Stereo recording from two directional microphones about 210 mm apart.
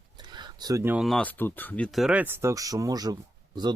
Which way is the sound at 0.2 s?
20° right (ahead or behind).